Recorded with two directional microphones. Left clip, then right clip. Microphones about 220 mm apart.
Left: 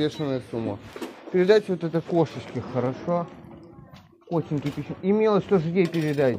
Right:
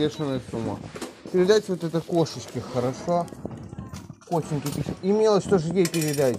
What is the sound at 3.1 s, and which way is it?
Speech, 55° right (ahead or behind).